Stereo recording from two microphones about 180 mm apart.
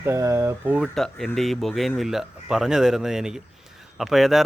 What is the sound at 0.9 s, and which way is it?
Speech, centre (ahead or behind).